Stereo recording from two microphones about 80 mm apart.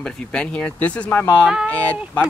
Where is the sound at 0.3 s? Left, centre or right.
Centre.